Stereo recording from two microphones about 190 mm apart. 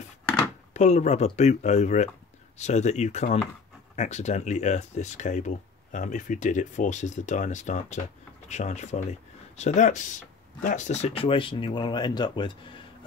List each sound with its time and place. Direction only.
0.7 s speech: 35° left (ahead or behind)